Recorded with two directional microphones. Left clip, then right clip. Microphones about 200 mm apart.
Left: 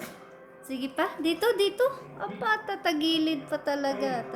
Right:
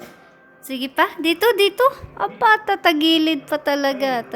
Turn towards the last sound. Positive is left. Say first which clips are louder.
# right 9 dB
turn(degrees=-50)  # may be behind; listen again after turning